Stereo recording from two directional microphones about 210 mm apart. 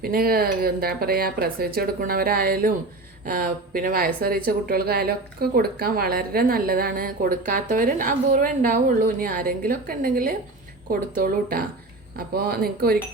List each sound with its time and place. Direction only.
0.0 s speech: 45° right (ahead or behind)